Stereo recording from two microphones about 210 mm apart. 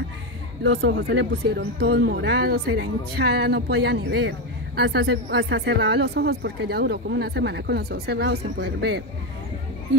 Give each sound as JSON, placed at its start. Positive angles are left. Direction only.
{"t": 0.7, "sound": "speech", "side_deg": -55}